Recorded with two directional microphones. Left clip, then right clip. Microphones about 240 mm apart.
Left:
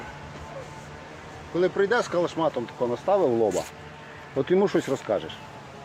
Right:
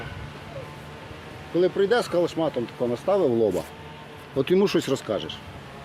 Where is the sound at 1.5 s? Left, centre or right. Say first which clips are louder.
Right 2 dB; right.